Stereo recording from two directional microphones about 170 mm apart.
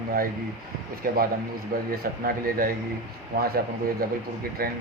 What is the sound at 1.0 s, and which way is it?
Speech, 60° right (ahead or behind).